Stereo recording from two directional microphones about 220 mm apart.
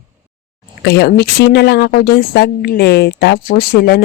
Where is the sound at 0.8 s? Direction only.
50° left (ahead or behind).